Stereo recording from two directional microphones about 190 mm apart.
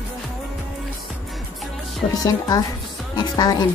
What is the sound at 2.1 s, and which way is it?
Speech, 20° left (ahead or behind).